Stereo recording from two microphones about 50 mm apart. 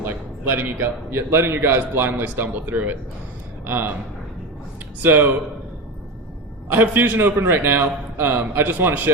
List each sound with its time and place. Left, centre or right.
0.0 s a sound: right
1.1 s a man's voice: right
5.0 s a man's voice: right
6.7 s a man's voice: right